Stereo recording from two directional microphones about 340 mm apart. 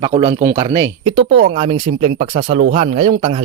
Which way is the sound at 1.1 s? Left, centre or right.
Right.